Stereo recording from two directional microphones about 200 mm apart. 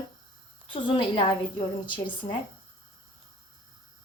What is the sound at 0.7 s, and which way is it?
A woman's voice, 25° left (ahead or behind).